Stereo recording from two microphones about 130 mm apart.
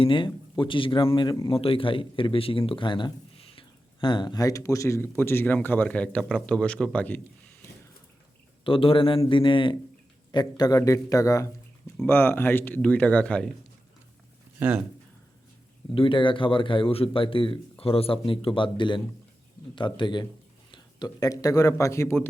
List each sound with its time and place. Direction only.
0.0 s speech: 40° left (ahead or behind); by 7.2 s 10° left (ahead or behind)
8.6 s speech: 45° left (ahead or behind); by 13.5 s 10° left (ahead or behind)
16.0 s speech: 40° left (ahead or behind); by 22.3 s 20° left (ahead or behind)